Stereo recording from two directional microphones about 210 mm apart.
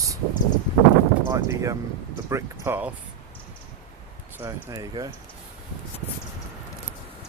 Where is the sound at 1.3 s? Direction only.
15° right (ahead or behind).